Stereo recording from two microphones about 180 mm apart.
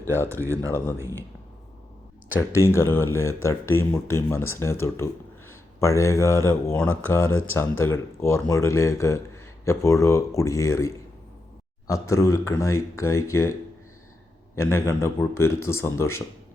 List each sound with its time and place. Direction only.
0.3 s speech: 15° right (ahead or behind)
2.5 s speech: 15° left (ahead or behind)
12.0 s speech: 15° left (ahead or behind)